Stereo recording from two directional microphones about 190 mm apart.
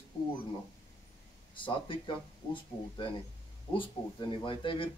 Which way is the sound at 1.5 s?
25° left (ahead or behind).